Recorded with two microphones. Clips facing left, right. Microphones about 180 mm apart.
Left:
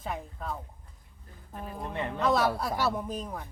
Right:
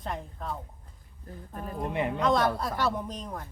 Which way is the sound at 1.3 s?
45° right (ahead or behind).